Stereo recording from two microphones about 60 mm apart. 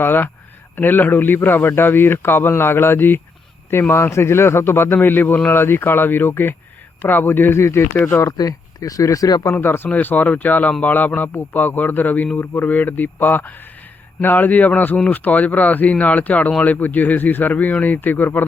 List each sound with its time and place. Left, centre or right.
0.0 s a man's voice: left
7.6 s speech: left
8.4 s speech: left
9.6 s a man's voice: left